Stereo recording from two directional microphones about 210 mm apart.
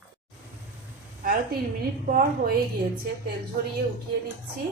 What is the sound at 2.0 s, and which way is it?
Speech, 40° right (ahead or behind).